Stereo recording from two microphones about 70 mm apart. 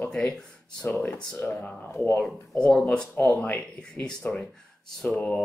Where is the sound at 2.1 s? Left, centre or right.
Centre.